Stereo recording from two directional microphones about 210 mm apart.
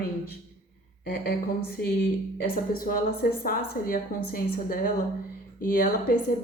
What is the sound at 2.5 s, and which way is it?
A woman's voice, 40° left (ahead or behind).